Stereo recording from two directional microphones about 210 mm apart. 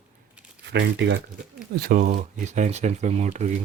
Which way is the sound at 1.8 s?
40° right (ahead or behind).